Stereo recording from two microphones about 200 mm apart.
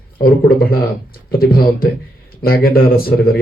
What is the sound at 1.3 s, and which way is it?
Speech, 50° left (ahead or behind).